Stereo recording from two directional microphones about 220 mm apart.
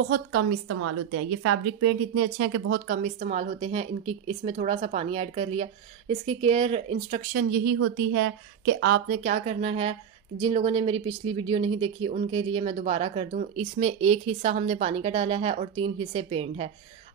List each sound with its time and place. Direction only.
0.1 s a woman's voice: 50° right (ahead or behind)
1.4 s speech: 75° right (ahead or behind)
2.7 s speech: 40° right (ahead or behind)
7.4 s a woman's voice: 50° right (ahead or behind)
7.8 s speech: 65° right (ahead or behind)
8.7 s speech: 50° right (ahead or behind); by 16.7 s 25° right (ahead or behind)